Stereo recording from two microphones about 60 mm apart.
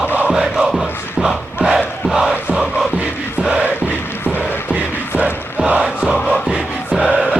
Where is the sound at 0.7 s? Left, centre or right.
Centre.